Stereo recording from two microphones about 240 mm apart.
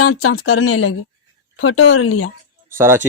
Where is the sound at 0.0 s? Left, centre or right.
Left.